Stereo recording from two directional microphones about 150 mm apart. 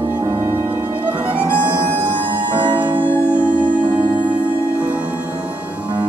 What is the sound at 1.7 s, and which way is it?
Music, 30° right (ahead or behind).